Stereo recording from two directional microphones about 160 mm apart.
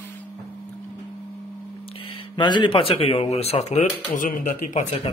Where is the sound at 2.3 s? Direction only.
30° left (ahead or behind); by 4.8 s 55° left (ahead or behind).